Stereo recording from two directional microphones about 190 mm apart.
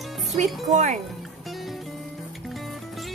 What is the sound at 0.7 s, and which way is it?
Speech, 40° right (ahead or behind).